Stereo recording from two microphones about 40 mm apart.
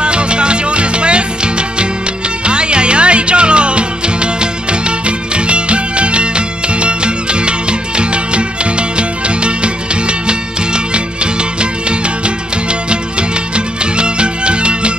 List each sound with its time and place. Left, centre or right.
0.0 s music: right
13.9 s music: right